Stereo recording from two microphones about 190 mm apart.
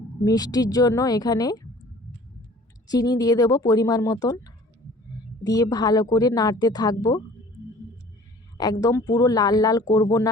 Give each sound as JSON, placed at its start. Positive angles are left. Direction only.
{"t": 0.3, "sound": "a woman's voice", "side_deg": 20}
{"t": 2.9, "sound": "a woman's voice", "side_deg": 20}
{"t": 8.5, "sound": "a woman's voice", "side_deg": 20}